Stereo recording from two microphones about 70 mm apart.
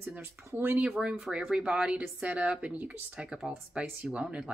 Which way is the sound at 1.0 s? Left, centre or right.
Centre.